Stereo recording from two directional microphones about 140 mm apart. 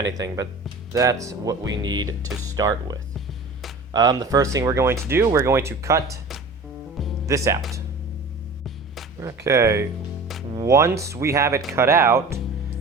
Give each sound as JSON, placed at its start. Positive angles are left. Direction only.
{"t": 0.9, "sound": "speech", "side_deg": -25}
{"t": 3.9, "sound": "speech", "side_deg": -25}
{"t": 6.9, "sound": "music", "side_deg": 0}
{"t": 7.3, "sound": "speech", "side_deg": -20}
{"t": 9.2, "sound": "speech", "side_deg": -20}